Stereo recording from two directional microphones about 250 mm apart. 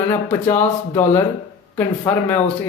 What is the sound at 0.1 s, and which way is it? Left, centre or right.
Speech, centre.